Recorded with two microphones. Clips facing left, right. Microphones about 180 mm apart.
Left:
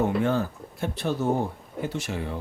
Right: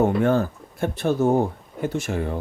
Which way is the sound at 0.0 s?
50° right (ahead or behind).